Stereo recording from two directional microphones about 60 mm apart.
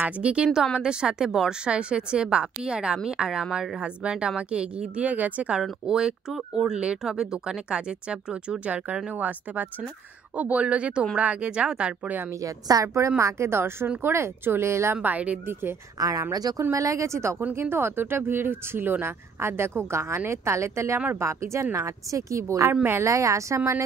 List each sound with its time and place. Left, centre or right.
0.0 s speech: centre
5.5 s speech: centre
6.3 s speech: centre
6.7 s speech: centre
12.4 s a woman's voice: right
13.2 s speech: right
15.0 s speech: right
16.0 s speech: right
16.7 s speech: right
17.6 s speech: right
21.7 s speech: right